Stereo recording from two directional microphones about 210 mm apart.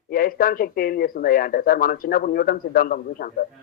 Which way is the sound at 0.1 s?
45° left (ahead or behind).